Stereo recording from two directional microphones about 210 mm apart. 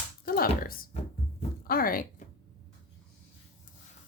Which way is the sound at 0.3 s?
45° left (ahead or behind).